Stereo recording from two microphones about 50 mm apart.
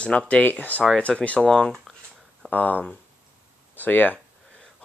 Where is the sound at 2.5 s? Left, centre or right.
Left.